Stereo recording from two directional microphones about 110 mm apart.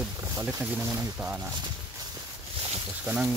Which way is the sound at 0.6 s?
15° right (ahead or behind).